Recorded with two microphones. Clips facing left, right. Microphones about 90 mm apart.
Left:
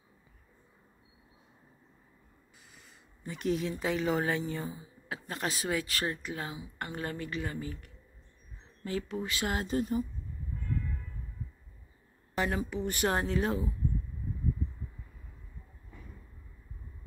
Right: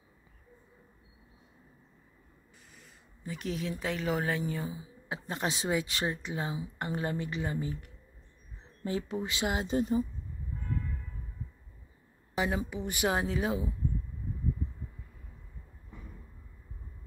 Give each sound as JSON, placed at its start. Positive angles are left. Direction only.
{"t": 2.7, "sound": "speech", "side_deg": 0}
{"t": 5.0, "sound": "a woman's voice", "side_deg": -20}
{"t": 12.4, "sound": "speech", "side_deg": -15}